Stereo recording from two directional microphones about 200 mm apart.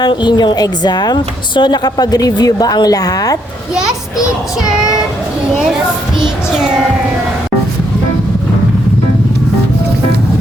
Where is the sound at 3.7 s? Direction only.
5° right (ahead or behind).